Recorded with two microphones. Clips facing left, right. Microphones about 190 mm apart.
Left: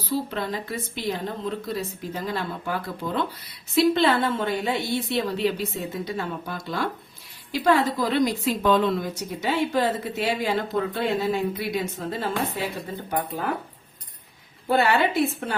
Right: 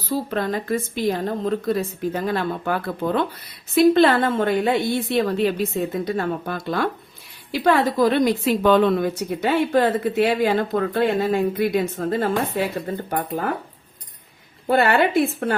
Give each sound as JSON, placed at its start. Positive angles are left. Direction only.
{"t": 0.1, "sound": "a woman's voice", "side_deg": -50}
{"t": 14.7, "sound": "a woman's voice", "side_deg": -55}